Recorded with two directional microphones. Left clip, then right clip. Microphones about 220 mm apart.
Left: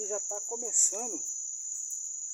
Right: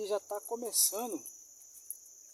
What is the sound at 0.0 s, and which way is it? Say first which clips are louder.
Cricket: even; 25° right (ahead or behind).